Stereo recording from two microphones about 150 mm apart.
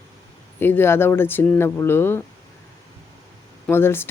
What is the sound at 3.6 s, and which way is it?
Speech, 15° left (ahead or behind).